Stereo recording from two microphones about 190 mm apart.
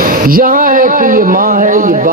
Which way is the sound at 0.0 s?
50° right (ahead or behind).